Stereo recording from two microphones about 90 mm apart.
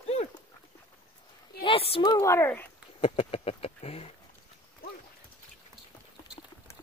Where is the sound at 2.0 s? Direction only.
45° left (ahead or behind).